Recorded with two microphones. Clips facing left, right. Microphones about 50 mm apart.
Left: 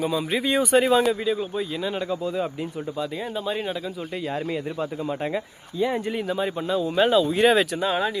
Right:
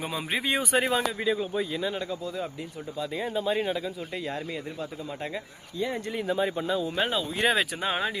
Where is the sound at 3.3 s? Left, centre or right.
Centre.